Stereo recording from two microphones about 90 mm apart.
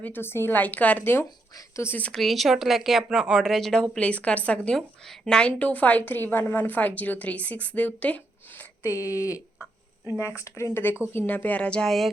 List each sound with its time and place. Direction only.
0.0 s speech: 25° left (ahead or behind)
2.0 s a woman's voice: 15° left (ahead or behind)
2.2 s a woman's voice: centre (ahead or behind); by 8.6 s 15° left (ahead or behind)
8.8 s a woman's voice: 35° left (ahead or behind); by 12.1 s centre (ahead or behind)